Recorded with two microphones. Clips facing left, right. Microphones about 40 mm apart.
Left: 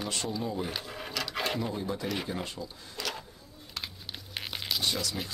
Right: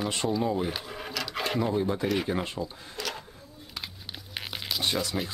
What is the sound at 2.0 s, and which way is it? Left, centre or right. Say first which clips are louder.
Speech: right 6 dB; centre.